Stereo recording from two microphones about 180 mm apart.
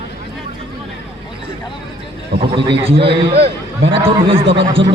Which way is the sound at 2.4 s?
30° right (ahead or behind).